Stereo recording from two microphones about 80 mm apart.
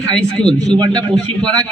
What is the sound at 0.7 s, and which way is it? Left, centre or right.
Speech, right.